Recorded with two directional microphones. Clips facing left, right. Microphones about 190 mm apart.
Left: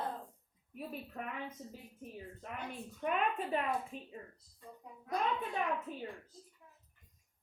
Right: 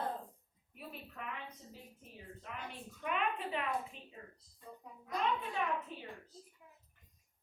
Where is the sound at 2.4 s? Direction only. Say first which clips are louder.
Left 3 dB; 50° left (ahead or behind).